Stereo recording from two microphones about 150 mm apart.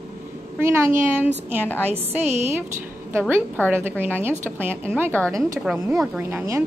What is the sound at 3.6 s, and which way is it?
Speech, 15° right (ahead or behind).